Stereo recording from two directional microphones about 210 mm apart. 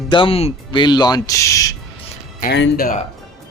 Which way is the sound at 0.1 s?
25° left (ahead or behind).